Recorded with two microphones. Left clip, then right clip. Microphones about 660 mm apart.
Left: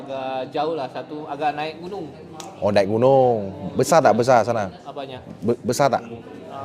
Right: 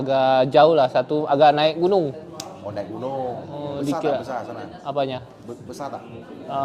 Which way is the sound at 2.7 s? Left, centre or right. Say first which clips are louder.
Left 13 dB; left.